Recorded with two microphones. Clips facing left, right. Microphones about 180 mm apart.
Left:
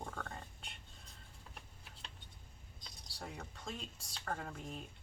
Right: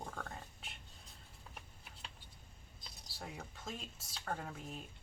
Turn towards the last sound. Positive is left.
turn(degrees=-5)  # may be behind; listen again after turning